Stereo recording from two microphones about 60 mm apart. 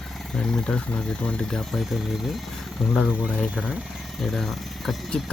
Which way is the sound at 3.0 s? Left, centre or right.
Centre.